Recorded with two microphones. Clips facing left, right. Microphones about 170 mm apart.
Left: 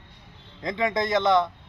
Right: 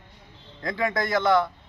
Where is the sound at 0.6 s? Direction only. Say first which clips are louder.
Left 1 dB; 20° left (ahead or behind).